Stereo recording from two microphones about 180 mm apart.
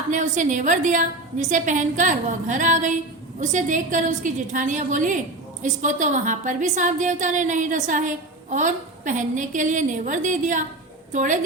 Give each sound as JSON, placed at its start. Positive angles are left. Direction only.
{"t": 0.1, "sound": "a woman's voice", "side_deg": -45}